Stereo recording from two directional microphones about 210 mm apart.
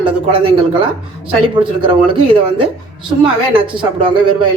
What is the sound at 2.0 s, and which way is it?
Speech, 25° right (ahead or behind).